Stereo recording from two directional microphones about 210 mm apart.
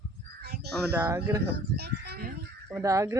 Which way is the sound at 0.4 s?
50° right (ahead or behind).